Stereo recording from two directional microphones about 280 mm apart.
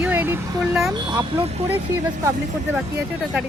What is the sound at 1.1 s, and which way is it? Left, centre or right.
Speech, centre.